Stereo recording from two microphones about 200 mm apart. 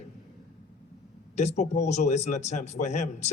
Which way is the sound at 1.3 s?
35° left (ahead or behind).